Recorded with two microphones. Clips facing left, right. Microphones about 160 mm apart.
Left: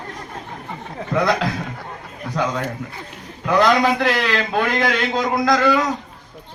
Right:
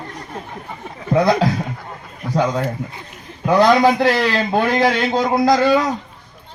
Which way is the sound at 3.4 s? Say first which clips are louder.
Right 3 dB; 30° right (ahead or behind).